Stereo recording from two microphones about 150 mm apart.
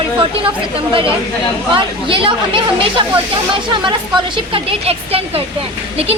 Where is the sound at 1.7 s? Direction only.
35° right (ahead or behind).